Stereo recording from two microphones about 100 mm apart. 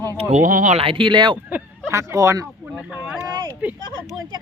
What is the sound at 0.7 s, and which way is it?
Speech, 65° right (ahead or behind).